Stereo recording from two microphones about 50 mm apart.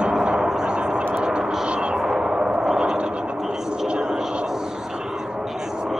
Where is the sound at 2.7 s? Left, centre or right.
Centre.